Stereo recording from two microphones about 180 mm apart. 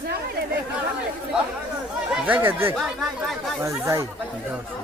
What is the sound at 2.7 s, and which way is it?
Speech, centre (ahead or behind).